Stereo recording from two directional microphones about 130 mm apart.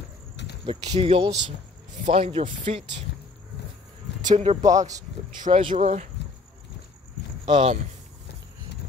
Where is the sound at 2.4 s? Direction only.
60° right (ahead or behind).